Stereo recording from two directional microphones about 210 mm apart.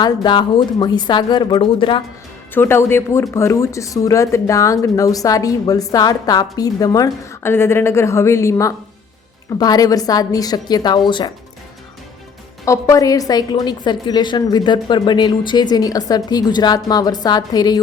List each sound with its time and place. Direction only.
0.0 s a woman's voice: 20° left (ahead or behind)
2.6 s a woman's voice: 10° left (ahead or behind)
12.6 s a woman's voice: 15° left (ahead or behind)